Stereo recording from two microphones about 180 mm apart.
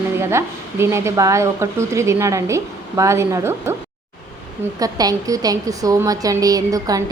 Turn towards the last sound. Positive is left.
turn(degrees=-20)  # may be behind; listen again after turning